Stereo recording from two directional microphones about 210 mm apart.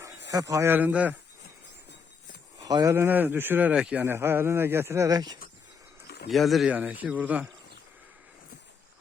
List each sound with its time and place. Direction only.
0.3 s speech: 15° right (ahead or behind)
2.6 s speech: 15° right (ahead or behind)
6.3 s speech: centre (ahead or behind)